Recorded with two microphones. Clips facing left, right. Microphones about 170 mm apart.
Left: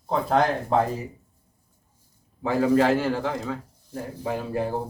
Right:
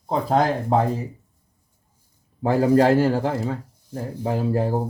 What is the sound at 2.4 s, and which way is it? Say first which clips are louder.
Speech: right 3 dB; 35° right (ahead or behind).